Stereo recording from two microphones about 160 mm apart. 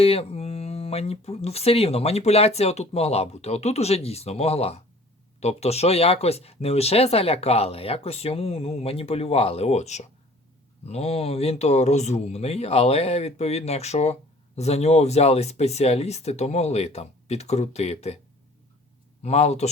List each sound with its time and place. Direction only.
0.0 s speech: 40° left (ahead or behind)
19.2 s a man's voice: 45° left (ahead or behind)